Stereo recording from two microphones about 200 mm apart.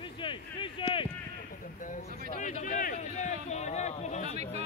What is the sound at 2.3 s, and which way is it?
A man's voice, 40° left (ahead or behind).